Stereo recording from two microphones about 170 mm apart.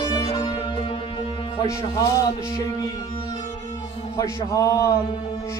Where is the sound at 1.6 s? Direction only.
20° left (ahead or behind).